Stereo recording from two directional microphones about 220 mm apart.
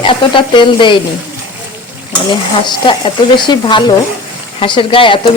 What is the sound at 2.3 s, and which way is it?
Speech, 20° left (ahead or behind).